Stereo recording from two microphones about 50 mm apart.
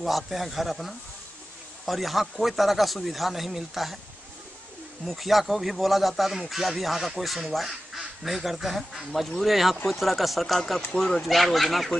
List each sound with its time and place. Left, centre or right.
0.0 s speech: centre
5.0 s speech: centre